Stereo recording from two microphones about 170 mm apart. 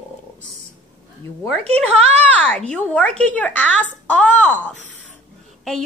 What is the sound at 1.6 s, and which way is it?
Speech, 35° right (ahead or behind).